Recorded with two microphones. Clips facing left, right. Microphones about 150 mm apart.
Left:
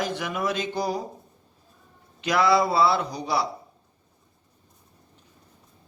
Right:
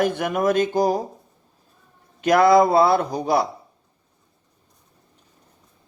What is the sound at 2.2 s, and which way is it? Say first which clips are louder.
Speech: right 6 dB; 50° right (ahead or behind).